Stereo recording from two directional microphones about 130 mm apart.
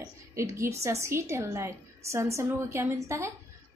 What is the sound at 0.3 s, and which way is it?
A woman's voice, 20° right (ahead or behind).